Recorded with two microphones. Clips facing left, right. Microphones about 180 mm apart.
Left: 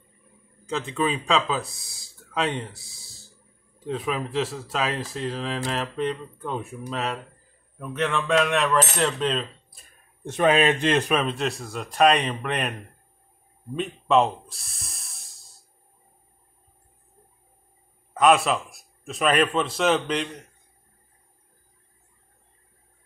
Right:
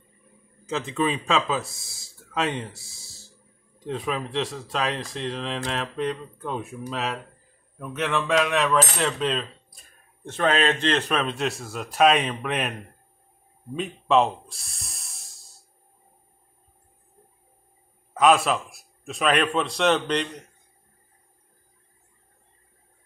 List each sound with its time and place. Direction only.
0.7 s speech: centre (ahead or behind)
7.8 s cutlery: centre (ahead or behind)
10.3 s a man's voice: 10° left (ahead or behind)
11.1 s speech: centre (ahead or behind)
13.7 s snort: centre (ahead or behind)
18.1 s speech: centre (ahead or behind)